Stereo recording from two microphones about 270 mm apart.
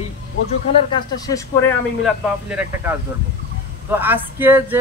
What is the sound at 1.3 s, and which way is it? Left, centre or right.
Speech, centre.